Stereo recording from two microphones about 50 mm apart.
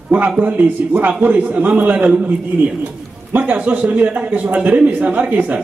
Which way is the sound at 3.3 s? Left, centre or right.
Right.